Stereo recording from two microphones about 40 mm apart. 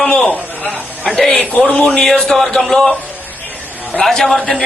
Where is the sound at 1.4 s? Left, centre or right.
Left.